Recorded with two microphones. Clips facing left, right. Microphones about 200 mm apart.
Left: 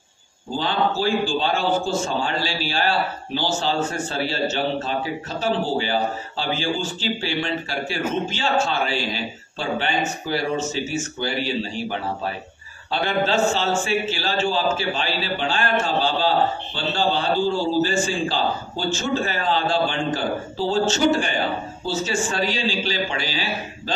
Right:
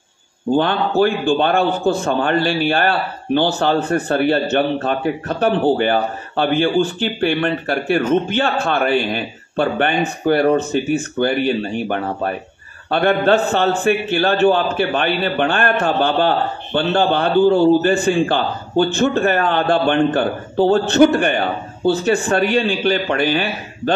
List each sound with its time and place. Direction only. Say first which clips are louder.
0.5 s a man's voice: right 6 dB; 60° right (ahead or behind)